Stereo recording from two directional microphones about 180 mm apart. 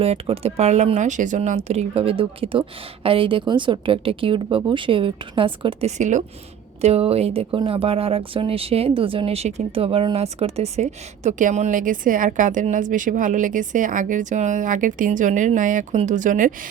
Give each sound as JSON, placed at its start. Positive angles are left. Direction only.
{"t": 0.0, "sound": "speech", "side_deg": -35}
{"t": 6.0, "sound": "speech", "side_deg": -40}